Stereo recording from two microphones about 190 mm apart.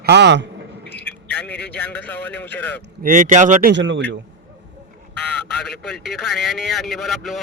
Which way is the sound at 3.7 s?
70° right (ahead or behind).